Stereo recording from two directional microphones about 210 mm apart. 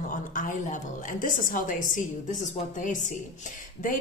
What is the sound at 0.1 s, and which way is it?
A woman's voice, 40° left (ahead or behind).